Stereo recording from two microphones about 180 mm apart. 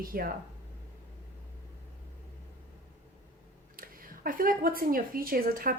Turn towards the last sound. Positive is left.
turn(degrees=-55)  # may be behind; listen again after turning